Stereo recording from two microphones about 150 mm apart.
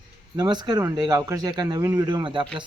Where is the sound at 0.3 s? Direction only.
30° right (ahead or behind).